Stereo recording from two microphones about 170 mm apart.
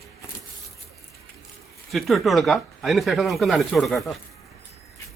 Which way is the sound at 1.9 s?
Centre (ahead or behind).